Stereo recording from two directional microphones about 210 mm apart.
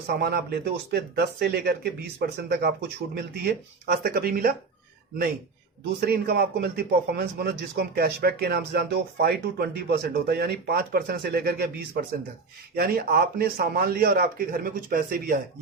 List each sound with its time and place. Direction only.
0.1 s a man's voice: 50° right (ahead or behind)
6.1 s a man's voice: 50° right (ahead or behind)
12.7 s a man's voice: 45° right (ahead or behind)